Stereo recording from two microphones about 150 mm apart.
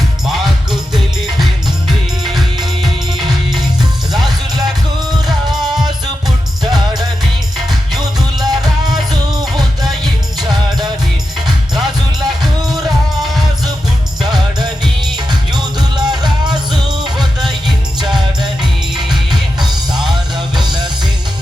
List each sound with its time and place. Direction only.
0.3 s music: centre (ahead or behind)
1.9 s music: centre (ahead or behind)
8.4 s music: 25° right (ahead or behind)
14.2 s music: 30° right (ahead or behind)
17.2 s music: centre (ahead or behind)
18.6 s music: 30° right (ahead or behind)